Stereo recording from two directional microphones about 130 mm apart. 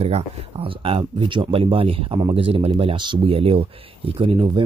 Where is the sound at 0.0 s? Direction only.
50° right (ahead or behind).